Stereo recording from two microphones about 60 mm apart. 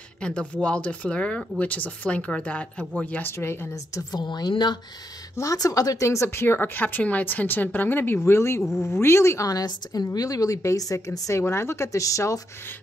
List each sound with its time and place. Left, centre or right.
0.2 s speech: centre
3.3 s speech: left
3.7 s a woman's voice: left
5.3 s speech: left
8.2 s speech: left
9.5 s speech: left
11.4 s speech: left